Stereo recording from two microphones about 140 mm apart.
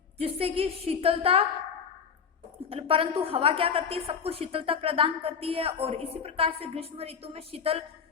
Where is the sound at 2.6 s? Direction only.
40° right (ahead or behind).